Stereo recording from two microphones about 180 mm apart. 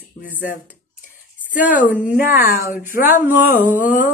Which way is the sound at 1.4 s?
10° right (ahead or behind).